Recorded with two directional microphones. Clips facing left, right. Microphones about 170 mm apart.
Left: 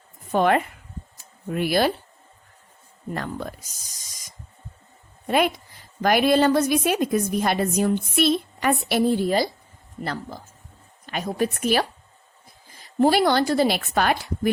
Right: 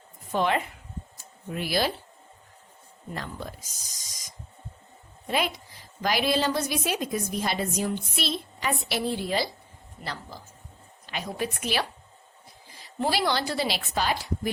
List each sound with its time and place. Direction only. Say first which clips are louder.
0.3 s a woman's voice: left 6 dB; 50° left (ahead or behind)
3.2 s a woman's voice: left 6 dB; 55° left (ahead or behind)
5.3 s a woman's voice: left 7 dB; 55° left (ahead or behind)
13.0 s a woman's voice: left 8 dB; 50° left (ahead or behind)